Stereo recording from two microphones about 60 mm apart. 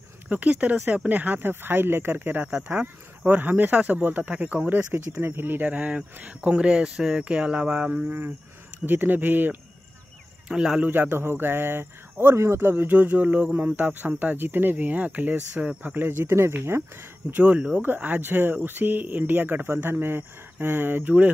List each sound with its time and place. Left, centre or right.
0.3 s speech: right
4.9 s speech: right
10.5 s a man's voice: centre
10.8 s speech: right
16.3 s speech: right
17.3 s speech: right